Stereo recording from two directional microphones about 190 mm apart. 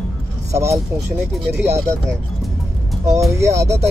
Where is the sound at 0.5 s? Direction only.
15° right (ahead or behind).